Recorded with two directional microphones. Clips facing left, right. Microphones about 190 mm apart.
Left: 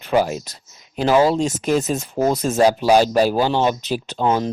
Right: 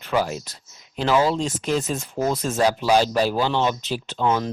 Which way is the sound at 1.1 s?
40° left (ahead or behind).